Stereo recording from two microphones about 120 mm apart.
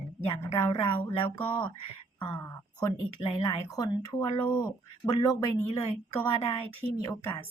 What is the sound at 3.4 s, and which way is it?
Speech, 30° left (ahead or behind).